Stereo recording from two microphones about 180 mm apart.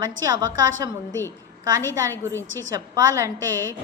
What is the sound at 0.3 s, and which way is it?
Speech, 20° right (ahead or behind).